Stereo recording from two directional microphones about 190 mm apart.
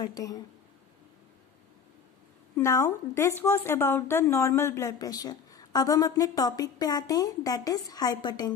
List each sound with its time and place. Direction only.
0.0 s a woman's voice: 20° left (ahead or behind)
2.5 s a woman's voice: 15° left (ahead or behind)